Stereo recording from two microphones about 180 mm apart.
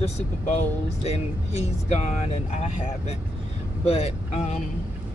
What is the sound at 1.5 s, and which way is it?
Speech, 35° left (ahead or behind).